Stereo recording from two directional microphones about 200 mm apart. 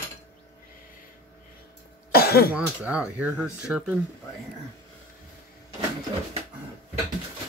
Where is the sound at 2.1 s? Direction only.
50° left (ahead or behind).